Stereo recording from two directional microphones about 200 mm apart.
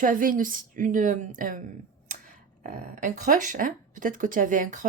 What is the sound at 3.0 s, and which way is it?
Speech, 40° right (ahead or behind).